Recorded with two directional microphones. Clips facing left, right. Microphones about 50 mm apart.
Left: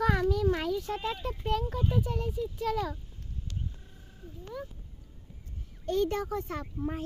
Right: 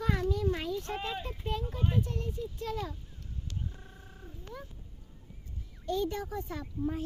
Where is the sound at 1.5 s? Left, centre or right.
Left.